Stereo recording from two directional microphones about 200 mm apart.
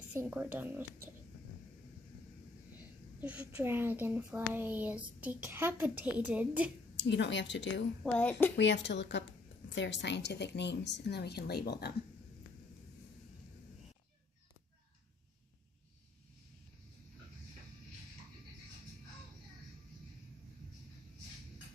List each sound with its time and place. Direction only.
0.1 s speech: 10° right (ahead or behind)
3.2 s speech: 10° right (ahead or behind)
7.0 s speech: 60° left (ahead or behind)
8.0 s a woman's voice: 5° left (ahead or behind)
8.5 s speech: 60° left (ahead or behind)